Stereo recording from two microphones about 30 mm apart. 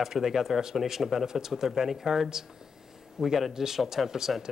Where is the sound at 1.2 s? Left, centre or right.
Centre.